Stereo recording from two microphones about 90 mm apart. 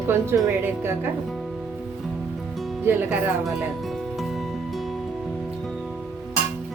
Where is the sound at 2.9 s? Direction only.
25° right (ahead or behind).